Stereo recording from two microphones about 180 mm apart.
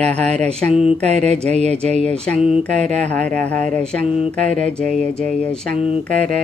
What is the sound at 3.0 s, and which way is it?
Speech, 5° left (ahead or behind).